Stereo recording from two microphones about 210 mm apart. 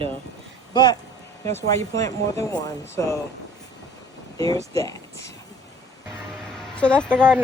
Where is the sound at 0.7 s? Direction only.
20° left (ahead or behind).